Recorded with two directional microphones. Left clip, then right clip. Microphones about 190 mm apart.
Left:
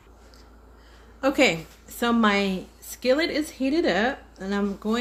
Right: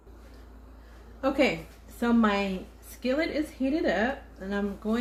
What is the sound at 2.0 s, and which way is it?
Speech, 65° left (ahead or behind).